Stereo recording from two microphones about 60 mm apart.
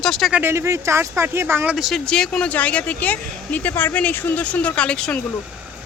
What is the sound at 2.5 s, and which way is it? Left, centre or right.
Speech, left.